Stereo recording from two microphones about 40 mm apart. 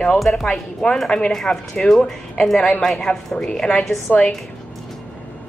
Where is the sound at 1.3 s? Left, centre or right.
Centre.